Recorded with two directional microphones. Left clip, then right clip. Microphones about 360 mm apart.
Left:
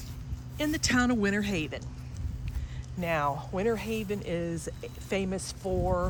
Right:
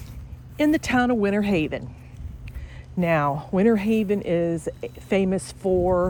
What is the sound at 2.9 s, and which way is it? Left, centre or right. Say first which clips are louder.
Speech: right 7 dB; centre.